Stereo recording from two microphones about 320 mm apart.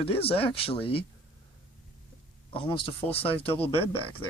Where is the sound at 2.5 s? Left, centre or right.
Centre.